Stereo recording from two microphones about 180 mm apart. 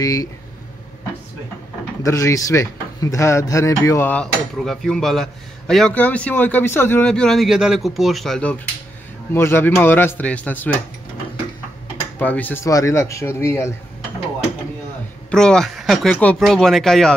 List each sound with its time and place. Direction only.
0.0 s speech: 20° left (ahead or behind)
2.0 s speech: 15° left (ahead or behind)
12.2 s speech: 10° left (ahead or behind)
15.3 s speech: 5° left (ahead or behind)